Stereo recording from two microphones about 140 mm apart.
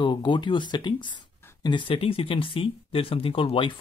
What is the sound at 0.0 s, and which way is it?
Speech, 35° left (ahead or behind).